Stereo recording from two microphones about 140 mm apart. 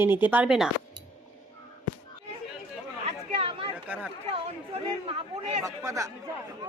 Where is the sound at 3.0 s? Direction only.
45° right (ahead or behind).